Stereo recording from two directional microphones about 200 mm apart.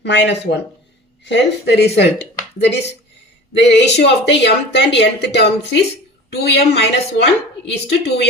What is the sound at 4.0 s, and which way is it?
Speech, 60° left (ahead or behind).